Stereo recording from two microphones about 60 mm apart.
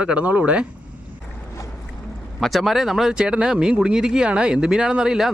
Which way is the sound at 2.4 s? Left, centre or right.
Centre.